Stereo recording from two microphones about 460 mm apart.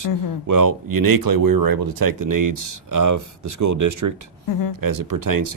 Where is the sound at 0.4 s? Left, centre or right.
Right.